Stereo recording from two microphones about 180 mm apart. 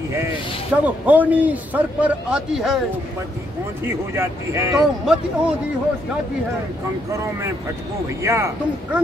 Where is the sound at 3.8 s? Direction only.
15° right (ahead or behind).